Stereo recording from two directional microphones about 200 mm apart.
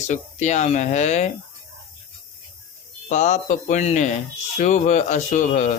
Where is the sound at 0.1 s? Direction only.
35° left (ahead or behind).